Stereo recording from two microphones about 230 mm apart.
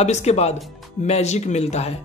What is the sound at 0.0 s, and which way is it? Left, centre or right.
Speech, left.